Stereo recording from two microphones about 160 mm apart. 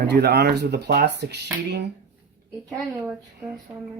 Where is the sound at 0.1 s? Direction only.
90° right.